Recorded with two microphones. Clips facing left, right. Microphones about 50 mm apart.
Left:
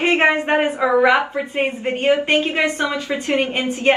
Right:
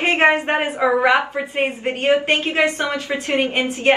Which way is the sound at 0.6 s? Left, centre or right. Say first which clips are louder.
Left 1 dB; centre.